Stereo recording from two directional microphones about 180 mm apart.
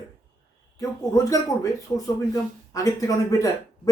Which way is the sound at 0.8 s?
20° left (ahead or behind).